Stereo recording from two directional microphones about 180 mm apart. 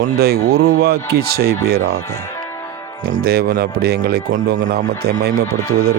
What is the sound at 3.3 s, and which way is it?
Speech, 60° right (ahead or behind).